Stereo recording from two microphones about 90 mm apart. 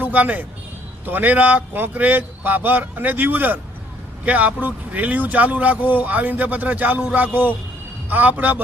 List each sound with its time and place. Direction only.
0.0 s a man's voice: 20° right (ahead or behind)